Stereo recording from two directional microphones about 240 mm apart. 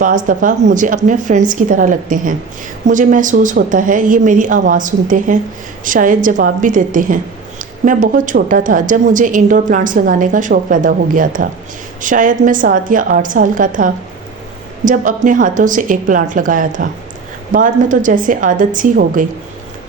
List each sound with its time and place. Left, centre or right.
0.0 s a woman's voice: right